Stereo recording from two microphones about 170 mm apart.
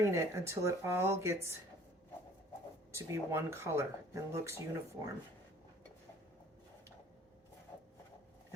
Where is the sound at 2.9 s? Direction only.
15° right (ahead or behind).